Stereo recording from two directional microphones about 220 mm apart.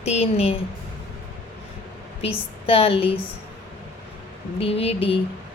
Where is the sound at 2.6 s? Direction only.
25° left (ahead or behind).